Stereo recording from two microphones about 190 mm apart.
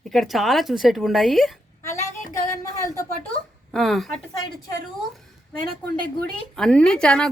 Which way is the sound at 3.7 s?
Centre (ahead or behind).